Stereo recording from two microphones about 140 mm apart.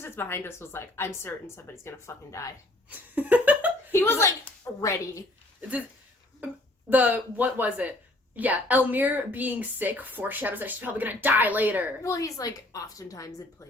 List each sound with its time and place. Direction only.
0.0 s a woman's voice: 15° left (ahead or behind)
3.2 s a sound: 10° right (ahead or behind)
3.9 s a sound: 15° left (ahead or behind)
4.8 s a woman's voice: 20° left (ahead or behind)
6.9 s a woman's voice: 10° right (ahead or behind)
12.0 s a woman's voice: 25° left (ahead or behind)